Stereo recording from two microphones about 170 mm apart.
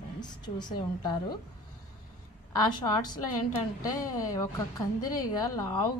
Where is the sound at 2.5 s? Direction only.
25° left (ahead or behind).